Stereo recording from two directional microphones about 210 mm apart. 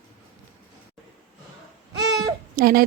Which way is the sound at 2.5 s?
45° right (ahead or behind).